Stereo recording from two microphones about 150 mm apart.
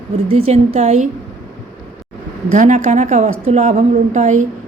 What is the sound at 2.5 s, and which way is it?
A woman's voice, 55° right (ahead or behind).